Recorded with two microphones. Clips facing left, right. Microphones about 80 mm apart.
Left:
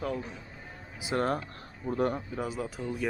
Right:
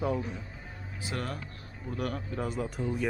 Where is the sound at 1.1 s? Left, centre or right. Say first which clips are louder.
Left 8 dB; left.